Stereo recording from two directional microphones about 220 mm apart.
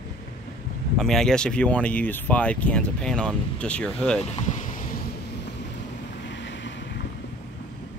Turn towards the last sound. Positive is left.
turn(degrees=55)  # may be behind; listen again after turning